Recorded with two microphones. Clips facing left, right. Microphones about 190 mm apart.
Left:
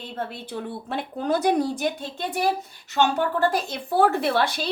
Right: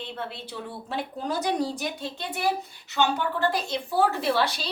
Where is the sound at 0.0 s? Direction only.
50° left (ahead or behind).